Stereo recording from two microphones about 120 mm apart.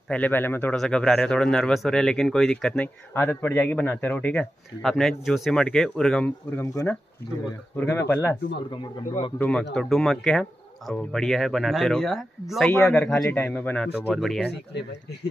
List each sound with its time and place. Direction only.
0.1 s a man's voice: 15° left (ahead or behind)
0.7 s a man's voice: 5° left (ahead or behind)
6.5 s a man's voice: 25° left (ahead or behind)
9.4 s speech: 5° left (ahead or behind)
12.7 s a man's voice: 15° left (ahead or behind)
14.1 s speech: centre (ahead or behind)